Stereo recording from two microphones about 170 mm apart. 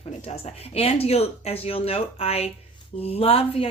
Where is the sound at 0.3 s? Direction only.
35° left (ahead or behind).